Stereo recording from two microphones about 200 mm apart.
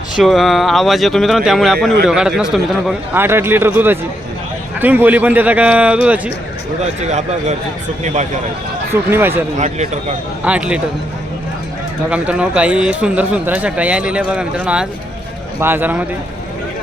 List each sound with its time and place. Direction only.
0.2 s speech: centre (ahead or behind)
7.0 s speech: 35° right (ahead or behind)
8.9 s speech: 10° right (ahead or behind)
9.6 s speech: 35° right (ahead or behind)
10.4 s speech: 5° right (ahead or behind)
12.1 s speech: 5° right (ahead or behind)